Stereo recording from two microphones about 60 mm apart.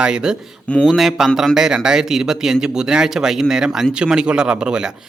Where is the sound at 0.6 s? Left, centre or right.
Left.